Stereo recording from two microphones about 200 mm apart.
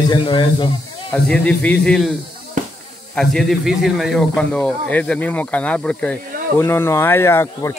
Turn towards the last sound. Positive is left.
turn(degrees=10)  # may be behind; listen again after turning